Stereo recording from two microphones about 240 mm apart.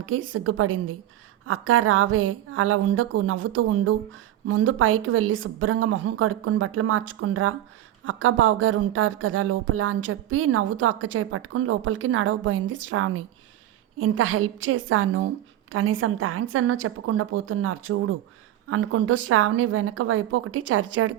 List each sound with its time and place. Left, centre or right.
0.0 s speech: right